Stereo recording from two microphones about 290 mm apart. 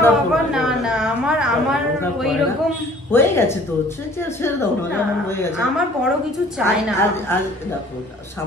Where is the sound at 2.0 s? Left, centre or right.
Centre.